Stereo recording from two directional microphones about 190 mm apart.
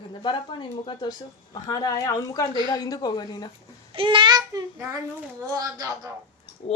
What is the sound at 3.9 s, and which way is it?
Child singing, 25° right (ahead or behind).